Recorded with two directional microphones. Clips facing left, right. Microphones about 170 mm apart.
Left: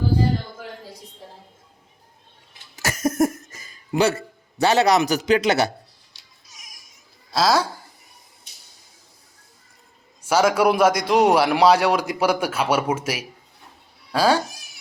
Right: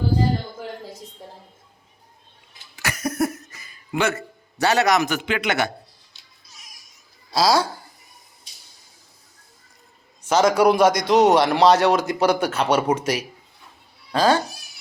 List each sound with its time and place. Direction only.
2.7 s cough: 45° left (ahead or behind)
4.6 s a man's voice: 25° left (ahead or behind)
7.3 s speech: centre (ahead or behind)
10.2 s a man's voice: 10° left (ahead or behind)